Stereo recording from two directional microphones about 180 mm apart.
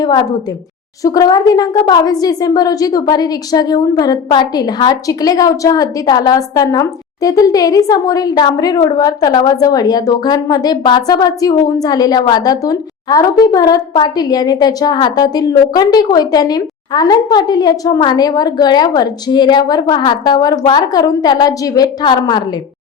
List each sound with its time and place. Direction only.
0.0 s a woman's voice: 20° left (ahead or behind)